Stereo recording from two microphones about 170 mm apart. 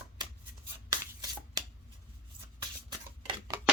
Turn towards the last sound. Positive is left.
turn(degrees=-25)  # may be behind; listen again after turning